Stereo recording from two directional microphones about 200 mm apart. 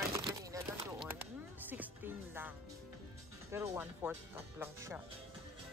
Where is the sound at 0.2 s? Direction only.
15° right (ahead or behind).